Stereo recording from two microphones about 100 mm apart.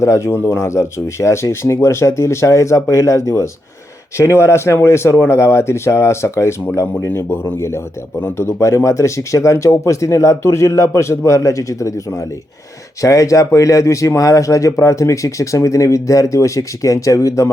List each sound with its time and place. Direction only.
0.0 s speech: 30° left (ahead or behind)
13.0 s speech: 35° left (ahead or behind)